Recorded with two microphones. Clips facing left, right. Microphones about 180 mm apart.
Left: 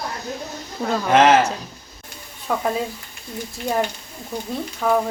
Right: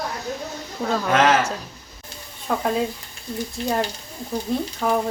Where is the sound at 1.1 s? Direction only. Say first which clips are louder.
Left 4 dB; 25° left (ahead or behind).